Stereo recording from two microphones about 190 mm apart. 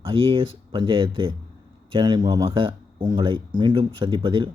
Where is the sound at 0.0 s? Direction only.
30° right (ahead or behind).